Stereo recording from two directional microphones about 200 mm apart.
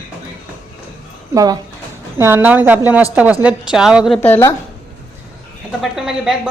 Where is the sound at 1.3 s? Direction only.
20° right (ahead or behind); by 4.6 s 10° left (ahead or behind).